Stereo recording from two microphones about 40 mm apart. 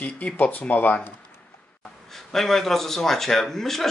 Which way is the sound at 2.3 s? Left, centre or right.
Centre.